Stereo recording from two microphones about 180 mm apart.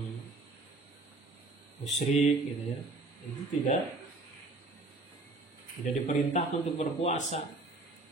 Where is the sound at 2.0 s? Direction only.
45° left (ahead or behind).